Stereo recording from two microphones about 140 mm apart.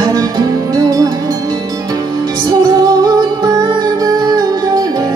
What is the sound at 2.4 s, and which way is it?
Music, 25° right (ahead or behind).